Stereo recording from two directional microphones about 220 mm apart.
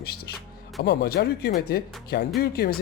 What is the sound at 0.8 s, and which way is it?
Speech, 45° left (ahead or behind).